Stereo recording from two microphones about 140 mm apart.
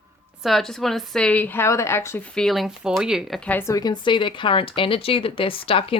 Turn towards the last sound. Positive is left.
turn(degrees=40)  # may be behind; listen again after turning